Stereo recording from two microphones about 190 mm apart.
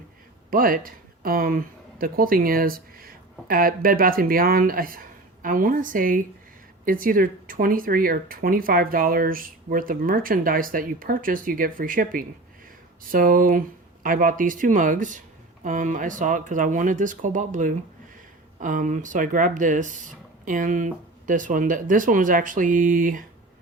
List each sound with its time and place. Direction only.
0.5 s speech: 50° right (ahead or behind)